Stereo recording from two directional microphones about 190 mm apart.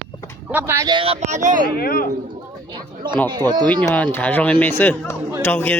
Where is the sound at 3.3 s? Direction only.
20° right (ahead or behind).